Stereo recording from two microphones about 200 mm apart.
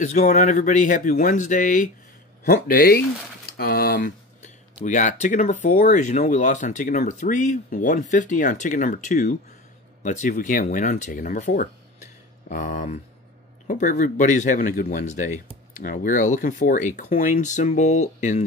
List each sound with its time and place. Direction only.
0.0 s speech: 40° left (ahead or behind)